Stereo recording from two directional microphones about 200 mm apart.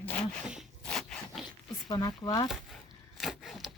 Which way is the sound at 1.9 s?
20° left (ahead or behind).